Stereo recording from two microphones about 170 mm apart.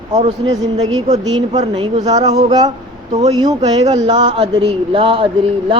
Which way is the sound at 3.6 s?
40° right (ahead or behind).